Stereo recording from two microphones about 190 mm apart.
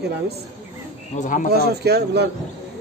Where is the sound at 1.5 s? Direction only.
60° right (ahead or behind).